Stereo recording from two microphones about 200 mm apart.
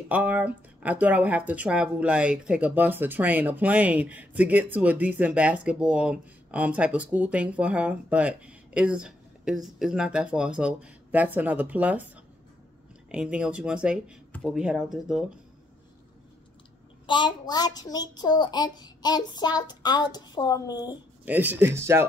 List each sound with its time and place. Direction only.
0.1 s speech: 5° right (ahead or behind)
13.1 s speech: 5° right (ahead or behind)
17.0 s a child's voice: 25° left (ahead or behind)
21.3 s speech: 10° right (ahead or behind)